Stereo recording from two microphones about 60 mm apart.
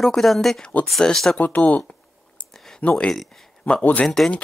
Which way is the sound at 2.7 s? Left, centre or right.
Centre.